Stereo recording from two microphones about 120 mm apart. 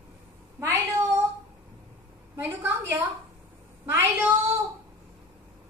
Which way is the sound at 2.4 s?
20° right (ahead or behind).